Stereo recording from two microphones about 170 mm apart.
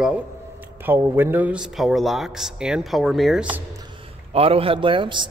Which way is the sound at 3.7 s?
30° right (ahead or behind).